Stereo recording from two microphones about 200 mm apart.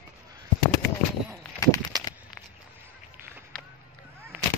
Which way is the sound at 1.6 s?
15° left (ahead or behind).